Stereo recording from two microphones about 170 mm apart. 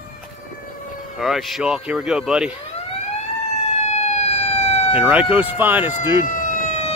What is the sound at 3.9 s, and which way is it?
Emergency vehicle, 40° left (ahead or behind).